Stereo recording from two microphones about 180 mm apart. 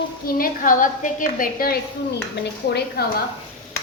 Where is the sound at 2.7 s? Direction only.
65° left (ahead or behind).